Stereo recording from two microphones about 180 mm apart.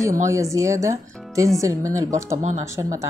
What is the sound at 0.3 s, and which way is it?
A woman's voice, 15° right (ahead or behind).